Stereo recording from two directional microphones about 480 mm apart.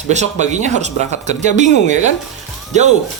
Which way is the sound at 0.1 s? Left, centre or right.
Centre.